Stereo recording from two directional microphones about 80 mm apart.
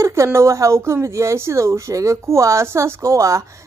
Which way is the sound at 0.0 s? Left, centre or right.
Right.